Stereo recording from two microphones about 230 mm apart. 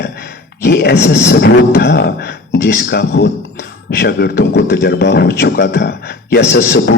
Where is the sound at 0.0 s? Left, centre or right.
Left.